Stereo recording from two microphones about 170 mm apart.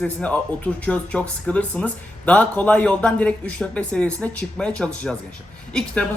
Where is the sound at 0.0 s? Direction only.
5° left (ahead or behind).